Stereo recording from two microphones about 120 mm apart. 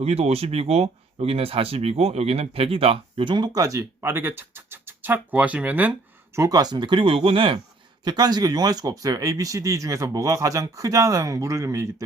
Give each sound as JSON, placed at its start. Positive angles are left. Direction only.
{"t": 0.0, "sound": "speech", "side_deg": -60}
{"t": 6.3, "sound": "speech", "side_deg": -30}
{"t": 8.0, "sound": "speech", "side_deg": -35}